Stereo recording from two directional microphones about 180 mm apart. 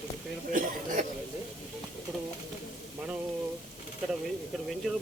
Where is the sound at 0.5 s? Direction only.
50° right (ahead or behind).